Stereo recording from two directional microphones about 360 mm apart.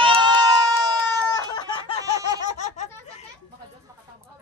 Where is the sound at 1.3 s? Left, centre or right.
Centre.